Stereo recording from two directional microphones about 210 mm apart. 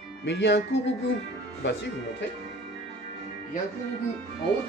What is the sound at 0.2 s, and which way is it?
Speech, 55° left (ahead or behind).